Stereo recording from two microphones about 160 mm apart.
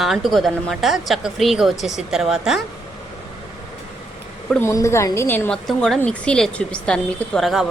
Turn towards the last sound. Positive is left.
turn(degrees=0)  # may be behind; listen again after turning